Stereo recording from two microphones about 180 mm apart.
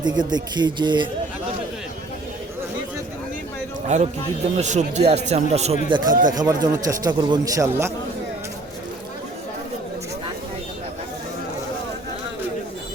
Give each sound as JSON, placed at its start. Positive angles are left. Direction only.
{"t": 0.0, "sound": "a man's voice", "side_deg": -25}
{"t": 3.8, "sound": "speech", "side_deg": -40}
{"t": 5.9, "sound": "a man's voice", "side_deg": -25}